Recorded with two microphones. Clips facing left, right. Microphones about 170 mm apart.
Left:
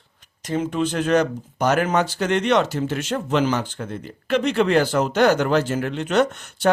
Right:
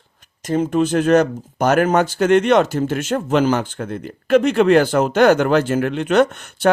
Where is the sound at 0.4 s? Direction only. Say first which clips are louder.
Right 5 dB; 45° right (ahead or behind).